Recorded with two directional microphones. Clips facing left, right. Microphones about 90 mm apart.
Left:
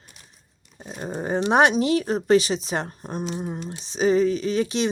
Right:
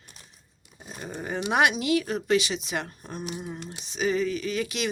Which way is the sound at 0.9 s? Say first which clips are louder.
Left 7 dB; 35° left (ahead or behind).